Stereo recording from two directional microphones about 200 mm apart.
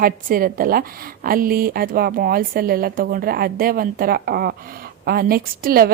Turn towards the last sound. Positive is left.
turn(degrees=-50)  # may be behind; listen again after turning